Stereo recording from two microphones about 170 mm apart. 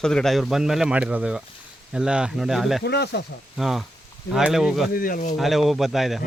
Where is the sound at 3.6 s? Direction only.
Centre (ahead or behind).